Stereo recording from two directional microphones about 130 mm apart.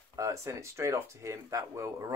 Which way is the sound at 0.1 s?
25° right (ahead or behind).